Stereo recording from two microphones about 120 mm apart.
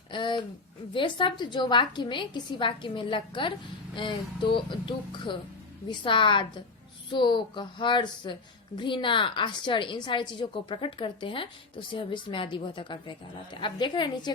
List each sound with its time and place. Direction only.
0.1 s a woman's voice: 40° left (ahead or behind)